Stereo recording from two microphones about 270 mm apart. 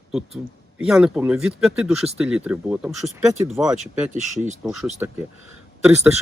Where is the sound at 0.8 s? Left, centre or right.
Centre.